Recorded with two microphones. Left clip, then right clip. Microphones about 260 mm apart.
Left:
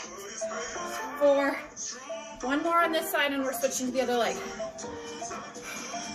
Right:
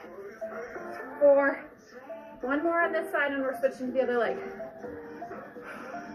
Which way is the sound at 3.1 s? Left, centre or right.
Left.